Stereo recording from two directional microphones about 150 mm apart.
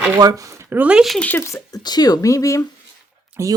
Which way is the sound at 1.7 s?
25° left (ahead or behind).